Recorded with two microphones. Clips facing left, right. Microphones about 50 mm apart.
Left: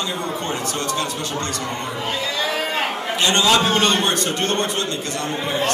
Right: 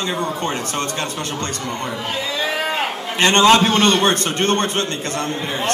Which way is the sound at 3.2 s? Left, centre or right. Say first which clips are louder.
Right 5 dB; right.